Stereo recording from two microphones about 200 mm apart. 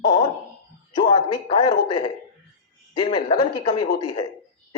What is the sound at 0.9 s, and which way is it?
Speech, 20° left (ahead or behind).